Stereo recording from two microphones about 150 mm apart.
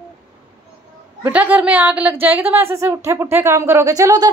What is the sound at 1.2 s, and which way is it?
A woman's voice, 10° right (ahead or behind).